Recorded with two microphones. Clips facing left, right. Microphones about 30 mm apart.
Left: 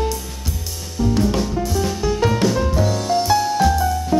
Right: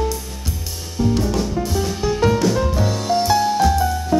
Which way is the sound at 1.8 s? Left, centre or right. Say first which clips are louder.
Even; centre.